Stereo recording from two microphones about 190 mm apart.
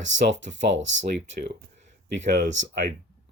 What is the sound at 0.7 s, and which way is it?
Speech, 80° right.